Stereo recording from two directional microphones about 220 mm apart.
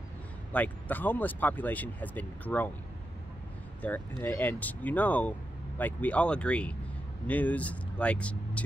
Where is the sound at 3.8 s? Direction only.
10° left (ahead or behind).